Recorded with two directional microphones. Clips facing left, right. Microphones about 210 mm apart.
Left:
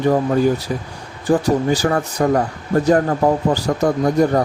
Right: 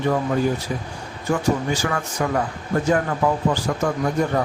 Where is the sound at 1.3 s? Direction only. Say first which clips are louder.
Left 5 dB; 35° left (ahead or behind).